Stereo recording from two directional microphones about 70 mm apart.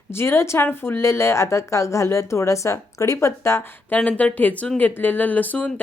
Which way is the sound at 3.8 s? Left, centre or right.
Left.